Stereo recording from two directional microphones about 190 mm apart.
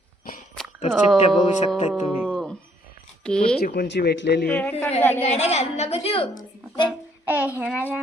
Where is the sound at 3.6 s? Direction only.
55° left (ahead or behind).